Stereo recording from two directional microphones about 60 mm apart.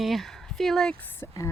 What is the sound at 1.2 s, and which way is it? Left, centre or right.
Speech, left.